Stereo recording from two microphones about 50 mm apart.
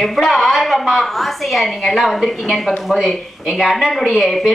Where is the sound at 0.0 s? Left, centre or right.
Centre.